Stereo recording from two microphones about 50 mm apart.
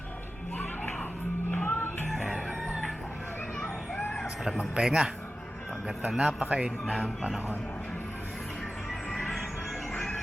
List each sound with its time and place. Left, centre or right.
1.5 s music: left
2.1 s chicken: centre
4.5 s speech: centre
6.1 s speech: centre
6.5 s a man's voice: right